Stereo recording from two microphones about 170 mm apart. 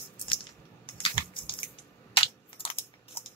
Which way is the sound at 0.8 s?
30° left (ahead or behind).